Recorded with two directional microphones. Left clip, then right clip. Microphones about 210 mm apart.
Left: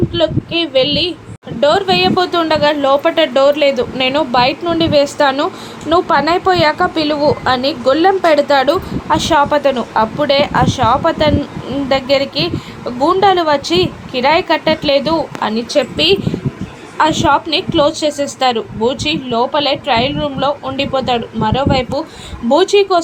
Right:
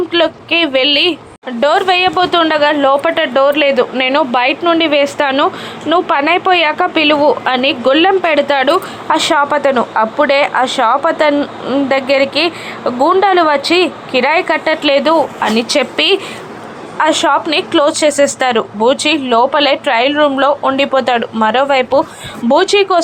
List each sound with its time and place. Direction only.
0.1 s a woman's voice: 20° right (ahead or behind)
15.5 s a woman's voice: 25° right (ahead or behind)